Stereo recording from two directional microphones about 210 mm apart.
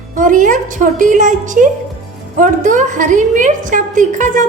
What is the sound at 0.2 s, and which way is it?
A woman's voice, 40° right (ahead or behind).